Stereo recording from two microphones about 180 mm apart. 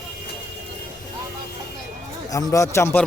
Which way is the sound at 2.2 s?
20° left (ahead or behind).